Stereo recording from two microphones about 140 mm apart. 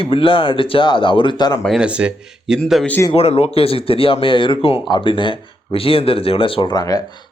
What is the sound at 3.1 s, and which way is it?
A man's voice, 45° left (ahead or behind).